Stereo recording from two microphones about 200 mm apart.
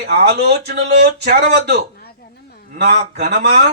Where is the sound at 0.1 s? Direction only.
55° right (ahead or behind).